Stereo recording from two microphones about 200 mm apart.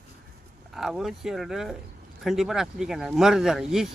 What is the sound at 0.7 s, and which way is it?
Speech, centre (ahead or behind).